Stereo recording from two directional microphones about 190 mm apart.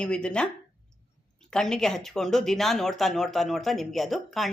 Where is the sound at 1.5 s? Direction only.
5° left (ahead or behind).